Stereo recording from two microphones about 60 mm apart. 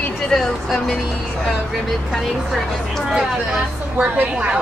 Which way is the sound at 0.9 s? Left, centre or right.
Centre.